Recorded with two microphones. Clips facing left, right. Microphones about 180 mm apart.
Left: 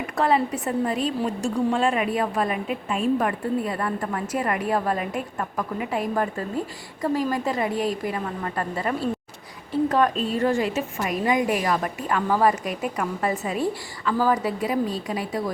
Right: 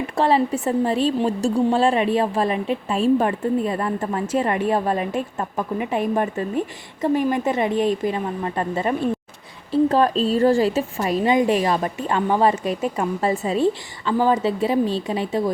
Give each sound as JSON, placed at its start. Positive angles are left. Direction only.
{"t": 0.2, "sound": "a woman's voice", "side_deg": -25}